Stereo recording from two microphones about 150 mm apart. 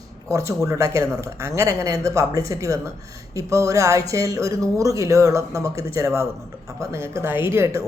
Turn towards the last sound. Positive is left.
turn(degrees=-20)  # may be behind; listen again after turning